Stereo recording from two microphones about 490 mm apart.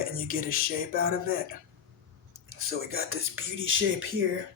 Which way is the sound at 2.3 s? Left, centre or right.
Right.